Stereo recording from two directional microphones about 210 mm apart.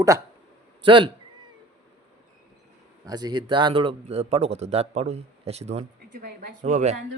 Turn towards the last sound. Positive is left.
turn(degrees=-35)  # may be behind; listen again after turning